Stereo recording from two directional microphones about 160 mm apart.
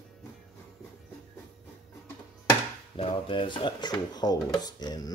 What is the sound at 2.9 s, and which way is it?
Speech, 35° left (ahead or behind).